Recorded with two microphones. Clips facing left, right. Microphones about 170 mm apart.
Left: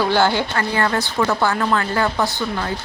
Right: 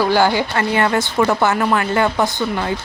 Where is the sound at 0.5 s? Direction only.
20° right (ahead or behind).